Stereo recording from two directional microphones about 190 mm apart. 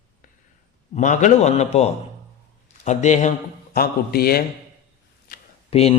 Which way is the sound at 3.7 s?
50° left (ahead or behind).